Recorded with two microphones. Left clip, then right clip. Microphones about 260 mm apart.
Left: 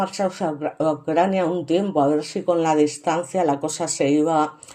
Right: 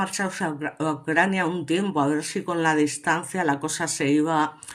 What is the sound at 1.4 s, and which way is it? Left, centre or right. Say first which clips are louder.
Speech: left 4 dB; right.